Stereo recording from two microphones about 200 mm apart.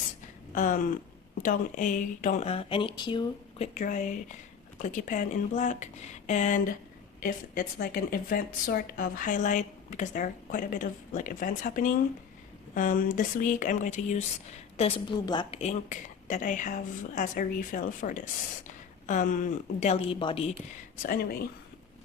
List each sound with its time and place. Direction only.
0.5 s a sound: 40° left (ahead or behind)
1.4 s speech: 40° left (ahead or behind); by 3.7 s 25° left (ahead or behind)
3.8 s speech: 40° left (ahead or behind)